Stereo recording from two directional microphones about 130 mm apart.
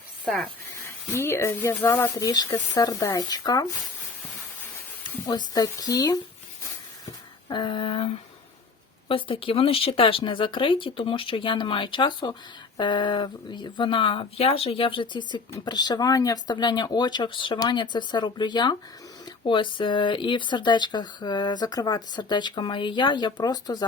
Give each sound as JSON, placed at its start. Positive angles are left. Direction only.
{"t": 0.3, "sound": "speech", "side_deg": 5}
{"t": 1.1, "sound": "speech", "side_deg": 20}
{"t": 2.1, "sound": "speech", "side_deg": 30}
{"t": 5.5, "sound": "speech", "side_deg": 30}
{"t": 7.5, "sound": "speech", "side_deg": 40}